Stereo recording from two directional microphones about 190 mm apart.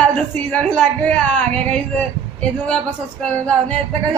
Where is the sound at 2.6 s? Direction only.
5° left (ahead or behind).